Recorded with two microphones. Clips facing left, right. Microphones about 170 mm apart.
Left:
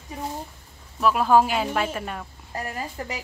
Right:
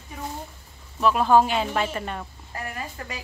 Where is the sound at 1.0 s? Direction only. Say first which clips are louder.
Even; 5° left (ahead or behind).